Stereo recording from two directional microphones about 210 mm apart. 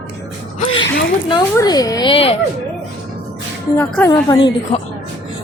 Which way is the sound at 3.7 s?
10° left (ahead or behind).